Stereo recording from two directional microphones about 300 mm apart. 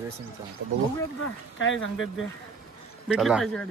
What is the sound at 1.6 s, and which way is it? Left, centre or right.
Speech, left.